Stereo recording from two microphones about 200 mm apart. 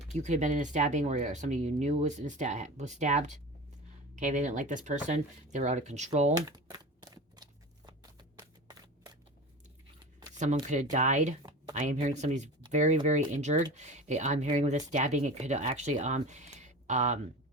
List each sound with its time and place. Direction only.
0.1 s speech: 35° right (ahead or behind)
6.5 s a sound: 20° right (ahead or behind)
8.4 s shuffling cards: 20° right (ahead or behind)
10.3 s speech: 35° right (ahead or behind)